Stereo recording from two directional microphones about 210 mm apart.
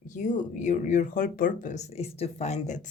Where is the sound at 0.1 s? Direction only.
35° left (ahead or behind).